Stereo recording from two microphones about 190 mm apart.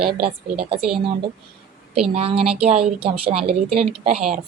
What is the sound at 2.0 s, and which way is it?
A woman's voice, 30° right (ahead or behind).